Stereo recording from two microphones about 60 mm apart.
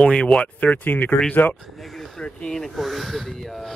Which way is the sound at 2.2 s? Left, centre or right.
Centre.